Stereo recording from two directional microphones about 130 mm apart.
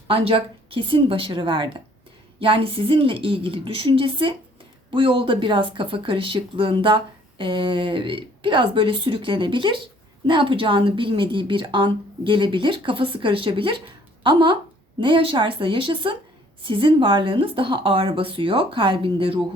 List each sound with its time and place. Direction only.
0.1 s speech: 45° right (ahead or behind)